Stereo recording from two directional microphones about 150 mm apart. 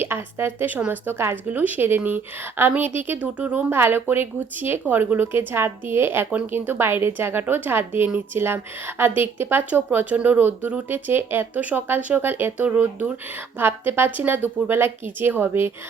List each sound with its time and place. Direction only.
0.0 s a woman's voice: 15° right (ahead or behind)